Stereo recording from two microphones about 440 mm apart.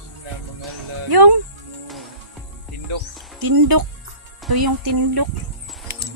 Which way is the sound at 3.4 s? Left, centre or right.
Right.